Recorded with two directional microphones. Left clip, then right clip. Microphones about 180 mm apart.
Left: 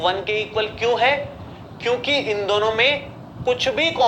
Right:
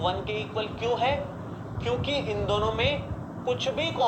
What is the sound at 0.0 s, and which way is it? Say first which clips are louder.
A man's voice: left 8 dB; 50° left (ahead or behind).